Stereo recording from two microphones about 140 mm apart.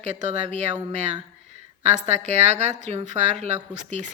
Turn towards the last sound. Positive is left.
turn(degrees=-60)  # may be behind; listen again after turning